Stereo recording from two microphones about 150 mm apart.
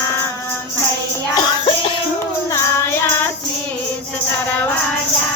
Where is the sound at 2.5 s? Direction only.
15° left (ahead or behind).